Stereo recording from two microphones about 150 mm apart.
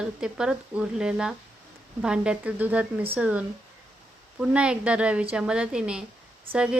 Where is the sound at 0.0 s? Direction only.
5° right (ahead or behind).